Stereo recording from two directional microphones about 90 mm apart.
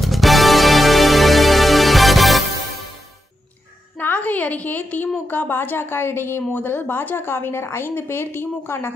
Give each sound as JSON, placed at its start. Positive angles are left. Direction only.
{"t": 0.0, "sound": "music", "side_deg": 0}
{"t": 4.0, "sound": "a sound", "side_deg": 15}
{"t": 5.3, "sound": "a woman's voice", "side_deg": 25}